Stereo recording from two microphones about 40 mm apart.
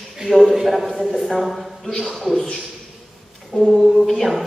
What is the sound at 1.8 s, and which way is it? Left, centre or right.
Music, centre.